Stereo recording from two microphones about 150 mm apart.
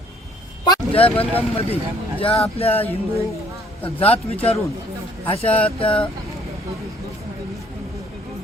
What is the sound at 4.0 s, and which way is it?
Speech, 40° left (ahead or behind).